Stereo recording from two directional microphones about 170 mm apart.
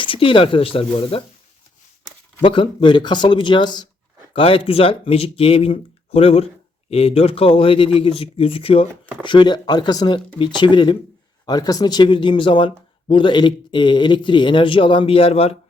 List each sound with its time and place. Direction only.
0.0 s speech: 30° left (ahead or behind)
2.4 s speech: 30° left (ahead or behind)